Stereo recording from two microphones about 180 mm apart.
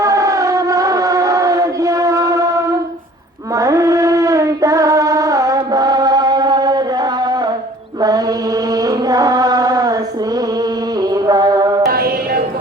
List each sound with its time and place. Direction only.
0.0 s civil defense siren: 15° right (ahead or behind)
3.5 s a sound: 20° right (ahead or behind)
8.0 s chant: 20° right (ahead or behind)
11.0 s mantra: 20° right (ahead or behind)
11.9 s mantra: 55° right (ahead or behind)